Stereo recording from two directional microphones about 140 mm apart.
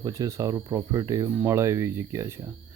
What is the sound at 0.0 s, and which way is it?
Speech, 25° right (ahead or behind).